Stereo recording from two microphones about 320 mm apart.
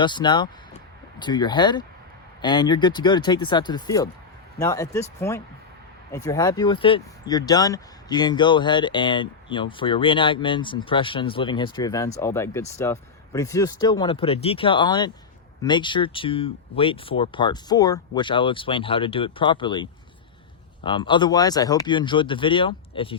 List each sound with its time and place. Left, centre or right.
0.0 s speech: centre